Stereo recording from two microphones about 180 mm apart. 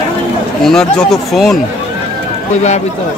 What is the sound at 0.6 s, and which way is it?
Speech, centre (ahead or behind).